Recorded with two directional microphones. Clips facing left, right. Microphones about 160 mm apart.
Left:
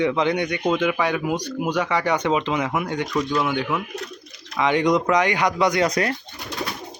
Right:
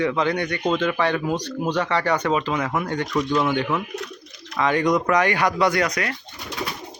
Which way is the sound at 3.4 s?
Centre (ahead or behind).